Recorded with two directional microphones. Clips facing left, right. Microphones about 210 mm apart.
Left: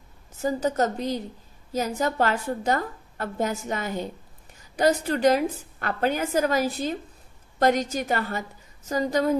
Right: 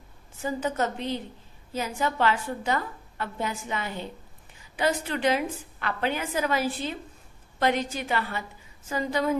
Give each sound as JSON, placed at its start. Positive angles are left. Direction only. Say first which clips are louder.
{"t": 0.4, "sound": "a woman's voice", "louder": "left 4 dB", "side_deg": 40}